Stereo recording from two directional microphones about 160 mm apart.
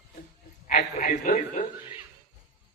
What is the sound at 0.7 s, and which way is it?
Speech, 60° left (ahead or behind).